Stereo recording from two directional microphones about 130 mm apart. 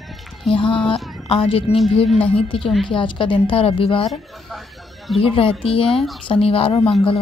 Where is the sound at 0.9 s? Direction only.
Centre (ahead or behind).